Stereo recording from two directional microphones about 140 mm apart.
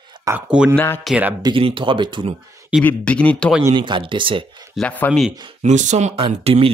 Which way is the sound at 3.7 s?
35° right (ahead or behind).